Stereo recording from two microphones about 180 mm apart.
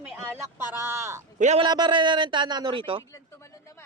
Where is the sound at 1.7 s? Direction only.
25° right (ahead or behind).